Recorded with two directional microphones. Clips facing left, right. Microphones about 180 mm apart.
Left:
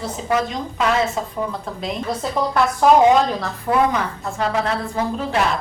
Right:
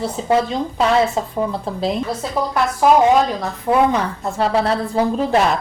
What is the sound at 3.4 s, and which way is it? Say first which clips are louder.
Speech: right 2 dB; 25° right (ahead or behind).